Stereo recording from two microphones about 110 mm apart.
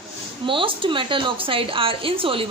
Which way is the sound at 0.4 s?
50° right (ahead or behind).